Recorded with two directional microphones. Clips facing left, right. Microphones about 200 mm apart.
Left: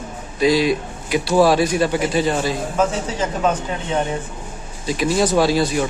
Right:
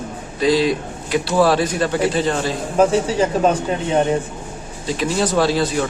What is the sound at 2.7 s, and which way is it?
Speech, 30° right (ahead or behind).